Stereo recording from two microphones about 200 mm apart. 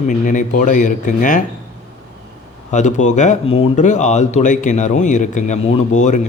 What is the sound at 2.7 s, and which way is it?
Speech, 35° left (ahead or behind).